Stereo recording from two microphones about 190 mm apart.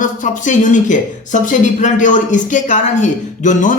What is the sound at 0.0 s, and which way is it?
Speech, 40° left (ahead or behind).